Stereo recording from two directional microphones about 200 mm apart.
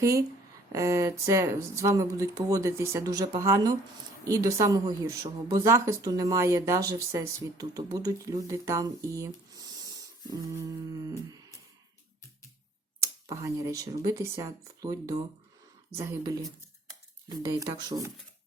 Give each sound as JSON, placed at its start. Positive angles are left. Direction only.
{"t": 0.0, "sound": "speech", "side_deg": -15}
{"t": 13.0, "sound": "speech", "side_deg": -15}